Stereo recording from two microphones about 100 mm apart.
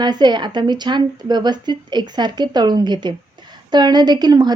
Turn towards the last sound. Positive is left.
turn(degrees=-45)  # may be behind; listen again after turning